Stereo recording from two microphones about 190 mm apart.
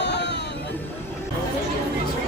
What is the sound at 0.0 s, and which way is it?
Music, 65° left (ahead or behind).